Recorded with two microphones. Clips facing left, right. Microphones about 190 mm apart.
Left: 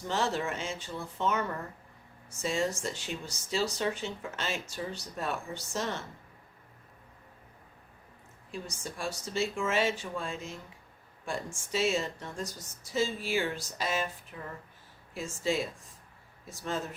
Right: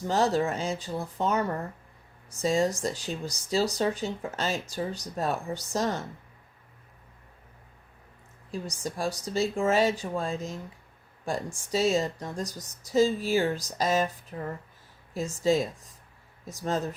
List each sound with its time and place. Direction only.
0.1 s speech: 40° right (ahead or behind)
8.4 s speech: 35° right (ahead or behind)